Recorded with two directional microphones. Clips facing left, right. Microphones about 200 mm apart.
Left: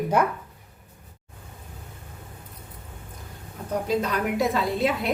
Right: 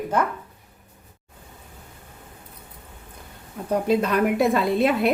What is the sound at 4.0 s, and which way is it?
A woman's voice, 60° right (ahead or behind).